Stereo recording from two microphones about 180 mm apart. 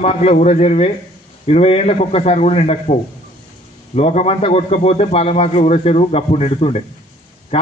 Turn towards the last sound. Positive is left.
turn(degrees=35)  # may be behind; listen again after turning